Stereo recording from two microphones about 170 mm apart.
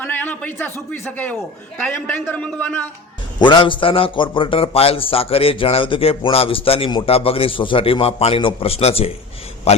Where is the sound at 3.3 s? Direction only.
25° left (ahead or behind).